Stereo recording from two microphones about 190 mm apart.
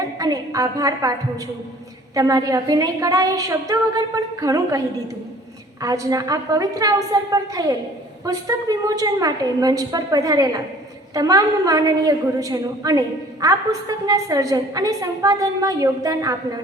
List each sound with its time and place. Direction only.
0.2 s a woman's voice: 20° right (ahead or behind)
2.1 s a woman's voice: 20° right (ahead or behind)
5.8 s a woman's voice: 20° right (ahead or behind)